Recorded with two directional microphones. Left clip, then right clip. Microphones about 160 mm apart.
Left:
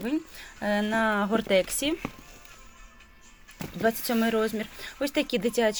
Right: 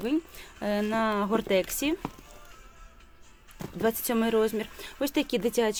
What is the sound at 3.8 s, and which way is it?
Speech, 25° right (ahead or behind).